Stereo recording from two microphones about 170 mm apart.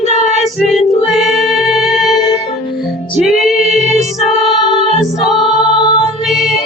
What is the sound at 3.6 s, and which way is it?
Music, 40° right (ahead or behind).